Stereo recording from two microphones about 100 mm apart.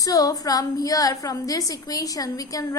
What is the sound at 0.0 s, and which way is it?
A woman's voice, 35° left (ahead or behind).